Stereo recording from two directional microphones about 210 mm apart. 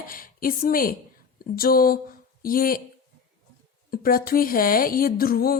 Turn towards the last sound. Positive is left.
turn(degrees=45)  # may be behind; listen again after turning